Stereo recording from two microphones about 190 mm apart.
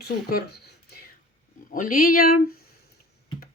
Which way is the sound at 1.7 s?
45° left (ahead or behind).